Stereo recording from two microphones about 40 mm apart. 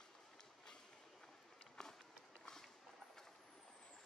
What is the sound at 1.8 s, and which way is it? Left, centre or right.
Run, centre.